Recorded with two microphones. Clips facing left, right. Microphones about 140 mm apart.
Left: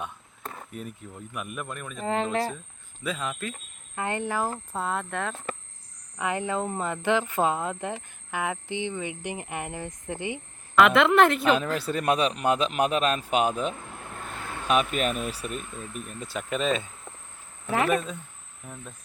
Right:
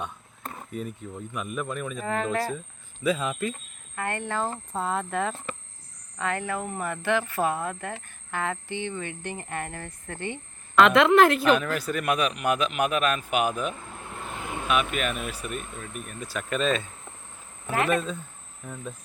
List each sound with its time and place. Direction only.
0.0 s speech: 5° left (ahead or behind)
2.0 s speech: 25° left (ahead or behind)
3.0 s speech: 5° right (ahead or behind)
3.9 s speech: 20° left (ahead or behind); by 5.4 s centre (ahead or behind)
6.1 s speech: 15° left (ahead or behind); by 11.5 s centre (ahead or behind)
11.5 s speech: 25° left (ahead or behind)
14.2 s vehicle: 10° right (ahead or behind)
14.7 s speech: 35° left (ahead or behind)
16.0 s speech: 20° left (ahead or behind)